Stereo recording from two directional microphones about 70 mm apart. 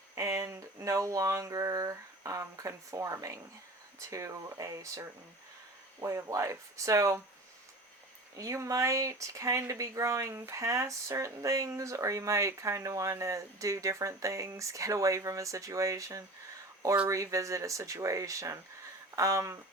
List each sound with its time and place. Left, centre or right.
0.2 s speech: right
8.4 s speech: right